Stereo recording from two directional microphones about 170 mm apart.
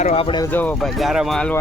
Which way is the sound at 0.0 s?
35° left (ahead or behind).